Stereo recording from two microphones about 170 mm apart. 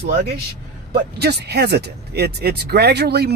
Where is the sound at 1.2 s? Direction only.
70° right (ahead or behind).